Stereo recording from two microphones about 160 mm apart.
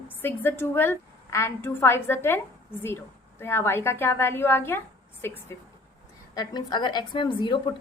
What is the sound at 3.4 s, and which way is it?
A woman's voice, 15° left (ahead or behind).